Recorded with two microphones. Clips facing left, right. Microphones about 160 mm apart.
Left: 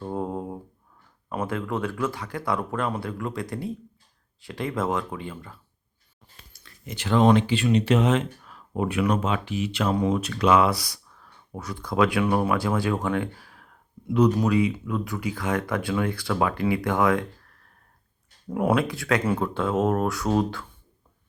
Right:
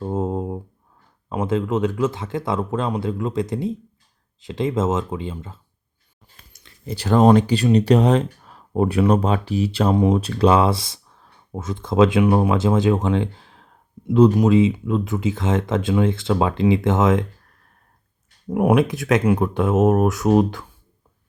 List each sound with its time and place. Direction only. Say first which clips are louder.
0.0 s a sound: right 6 dB; 20° right (ahead or behind)
1.3 s speech: right 7 dB; 20° right (ahead or behind)
18.5 s speech: right 6 dB; 15° right (ahead or behind)